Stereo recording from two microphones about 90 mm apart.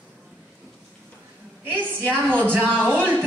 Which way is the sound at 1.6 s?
25° right (ahead or behind).